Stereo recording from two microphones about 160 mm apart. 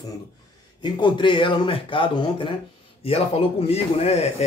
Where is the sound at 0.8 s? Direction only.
30° left (ahead or behind).